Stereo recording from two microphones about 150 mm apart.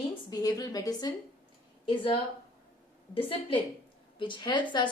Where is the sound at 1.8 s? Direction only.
35° left (ahead or behind).